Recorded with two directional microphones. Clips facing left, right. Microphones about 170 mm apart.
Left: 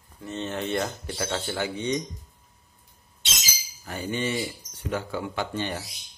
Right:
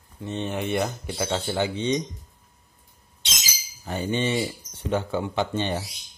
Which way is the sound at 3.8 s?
25° right (ahead or behind).